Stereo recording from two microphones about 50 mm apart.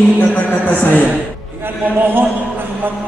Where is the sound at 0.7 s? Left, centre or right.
Left.